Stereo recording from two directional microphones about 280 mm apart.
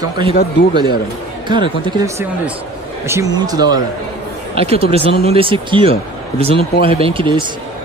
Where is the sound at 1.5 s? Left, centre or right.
Centre.